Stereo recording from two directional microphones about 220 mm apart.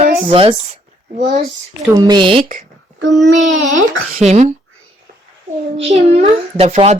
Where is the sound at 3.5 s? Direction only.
60° right (ahead or behind).